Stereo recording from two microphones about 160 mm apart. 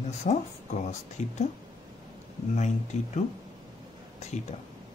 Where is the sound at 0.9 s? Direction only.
45° left (ahead or behind).